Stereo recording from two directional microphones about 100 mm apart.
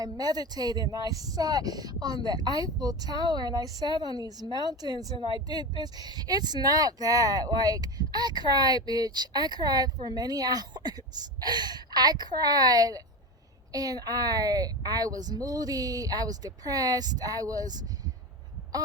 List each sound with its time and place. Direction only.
0.0 s speech: 40° right (ahead or behind)